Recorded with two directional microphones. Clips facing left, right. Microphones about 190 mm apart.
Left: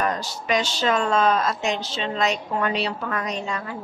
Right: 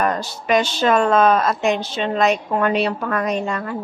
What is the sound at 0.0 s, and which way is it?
A woman's voice, 55° right (ahead or behind).